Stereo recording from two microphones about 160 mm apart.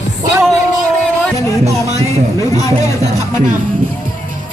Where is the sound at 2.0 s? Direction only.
20° left (ahead or behind).